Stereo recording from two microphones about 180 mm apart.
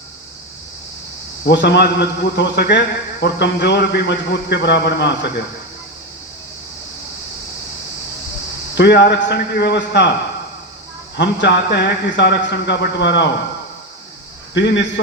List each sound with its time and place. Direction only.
1.5 s a man's voice: 70° left (ahead or behind)
8.7 s a man's voice: 70° left (ahead or behind)
11.2 s a man's voice: 75° left (ahead or behind)
14.5 s a man's voice: 80° left